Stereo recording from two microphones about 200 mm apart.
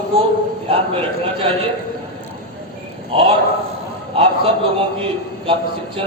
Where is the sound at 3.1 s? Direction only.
25° right (ahead or behind).